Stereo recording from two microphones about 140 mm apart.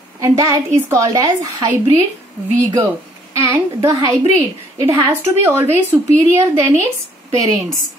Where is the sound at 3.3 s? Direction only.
20° right (ahead or behind).